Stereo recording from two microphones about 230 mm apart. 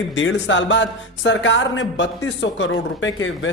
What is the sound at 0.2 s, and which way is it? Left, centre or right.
Speech, left.